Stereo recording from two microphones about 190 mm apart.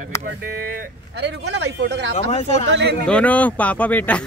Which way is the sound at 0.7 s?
65° right (ahead or behind).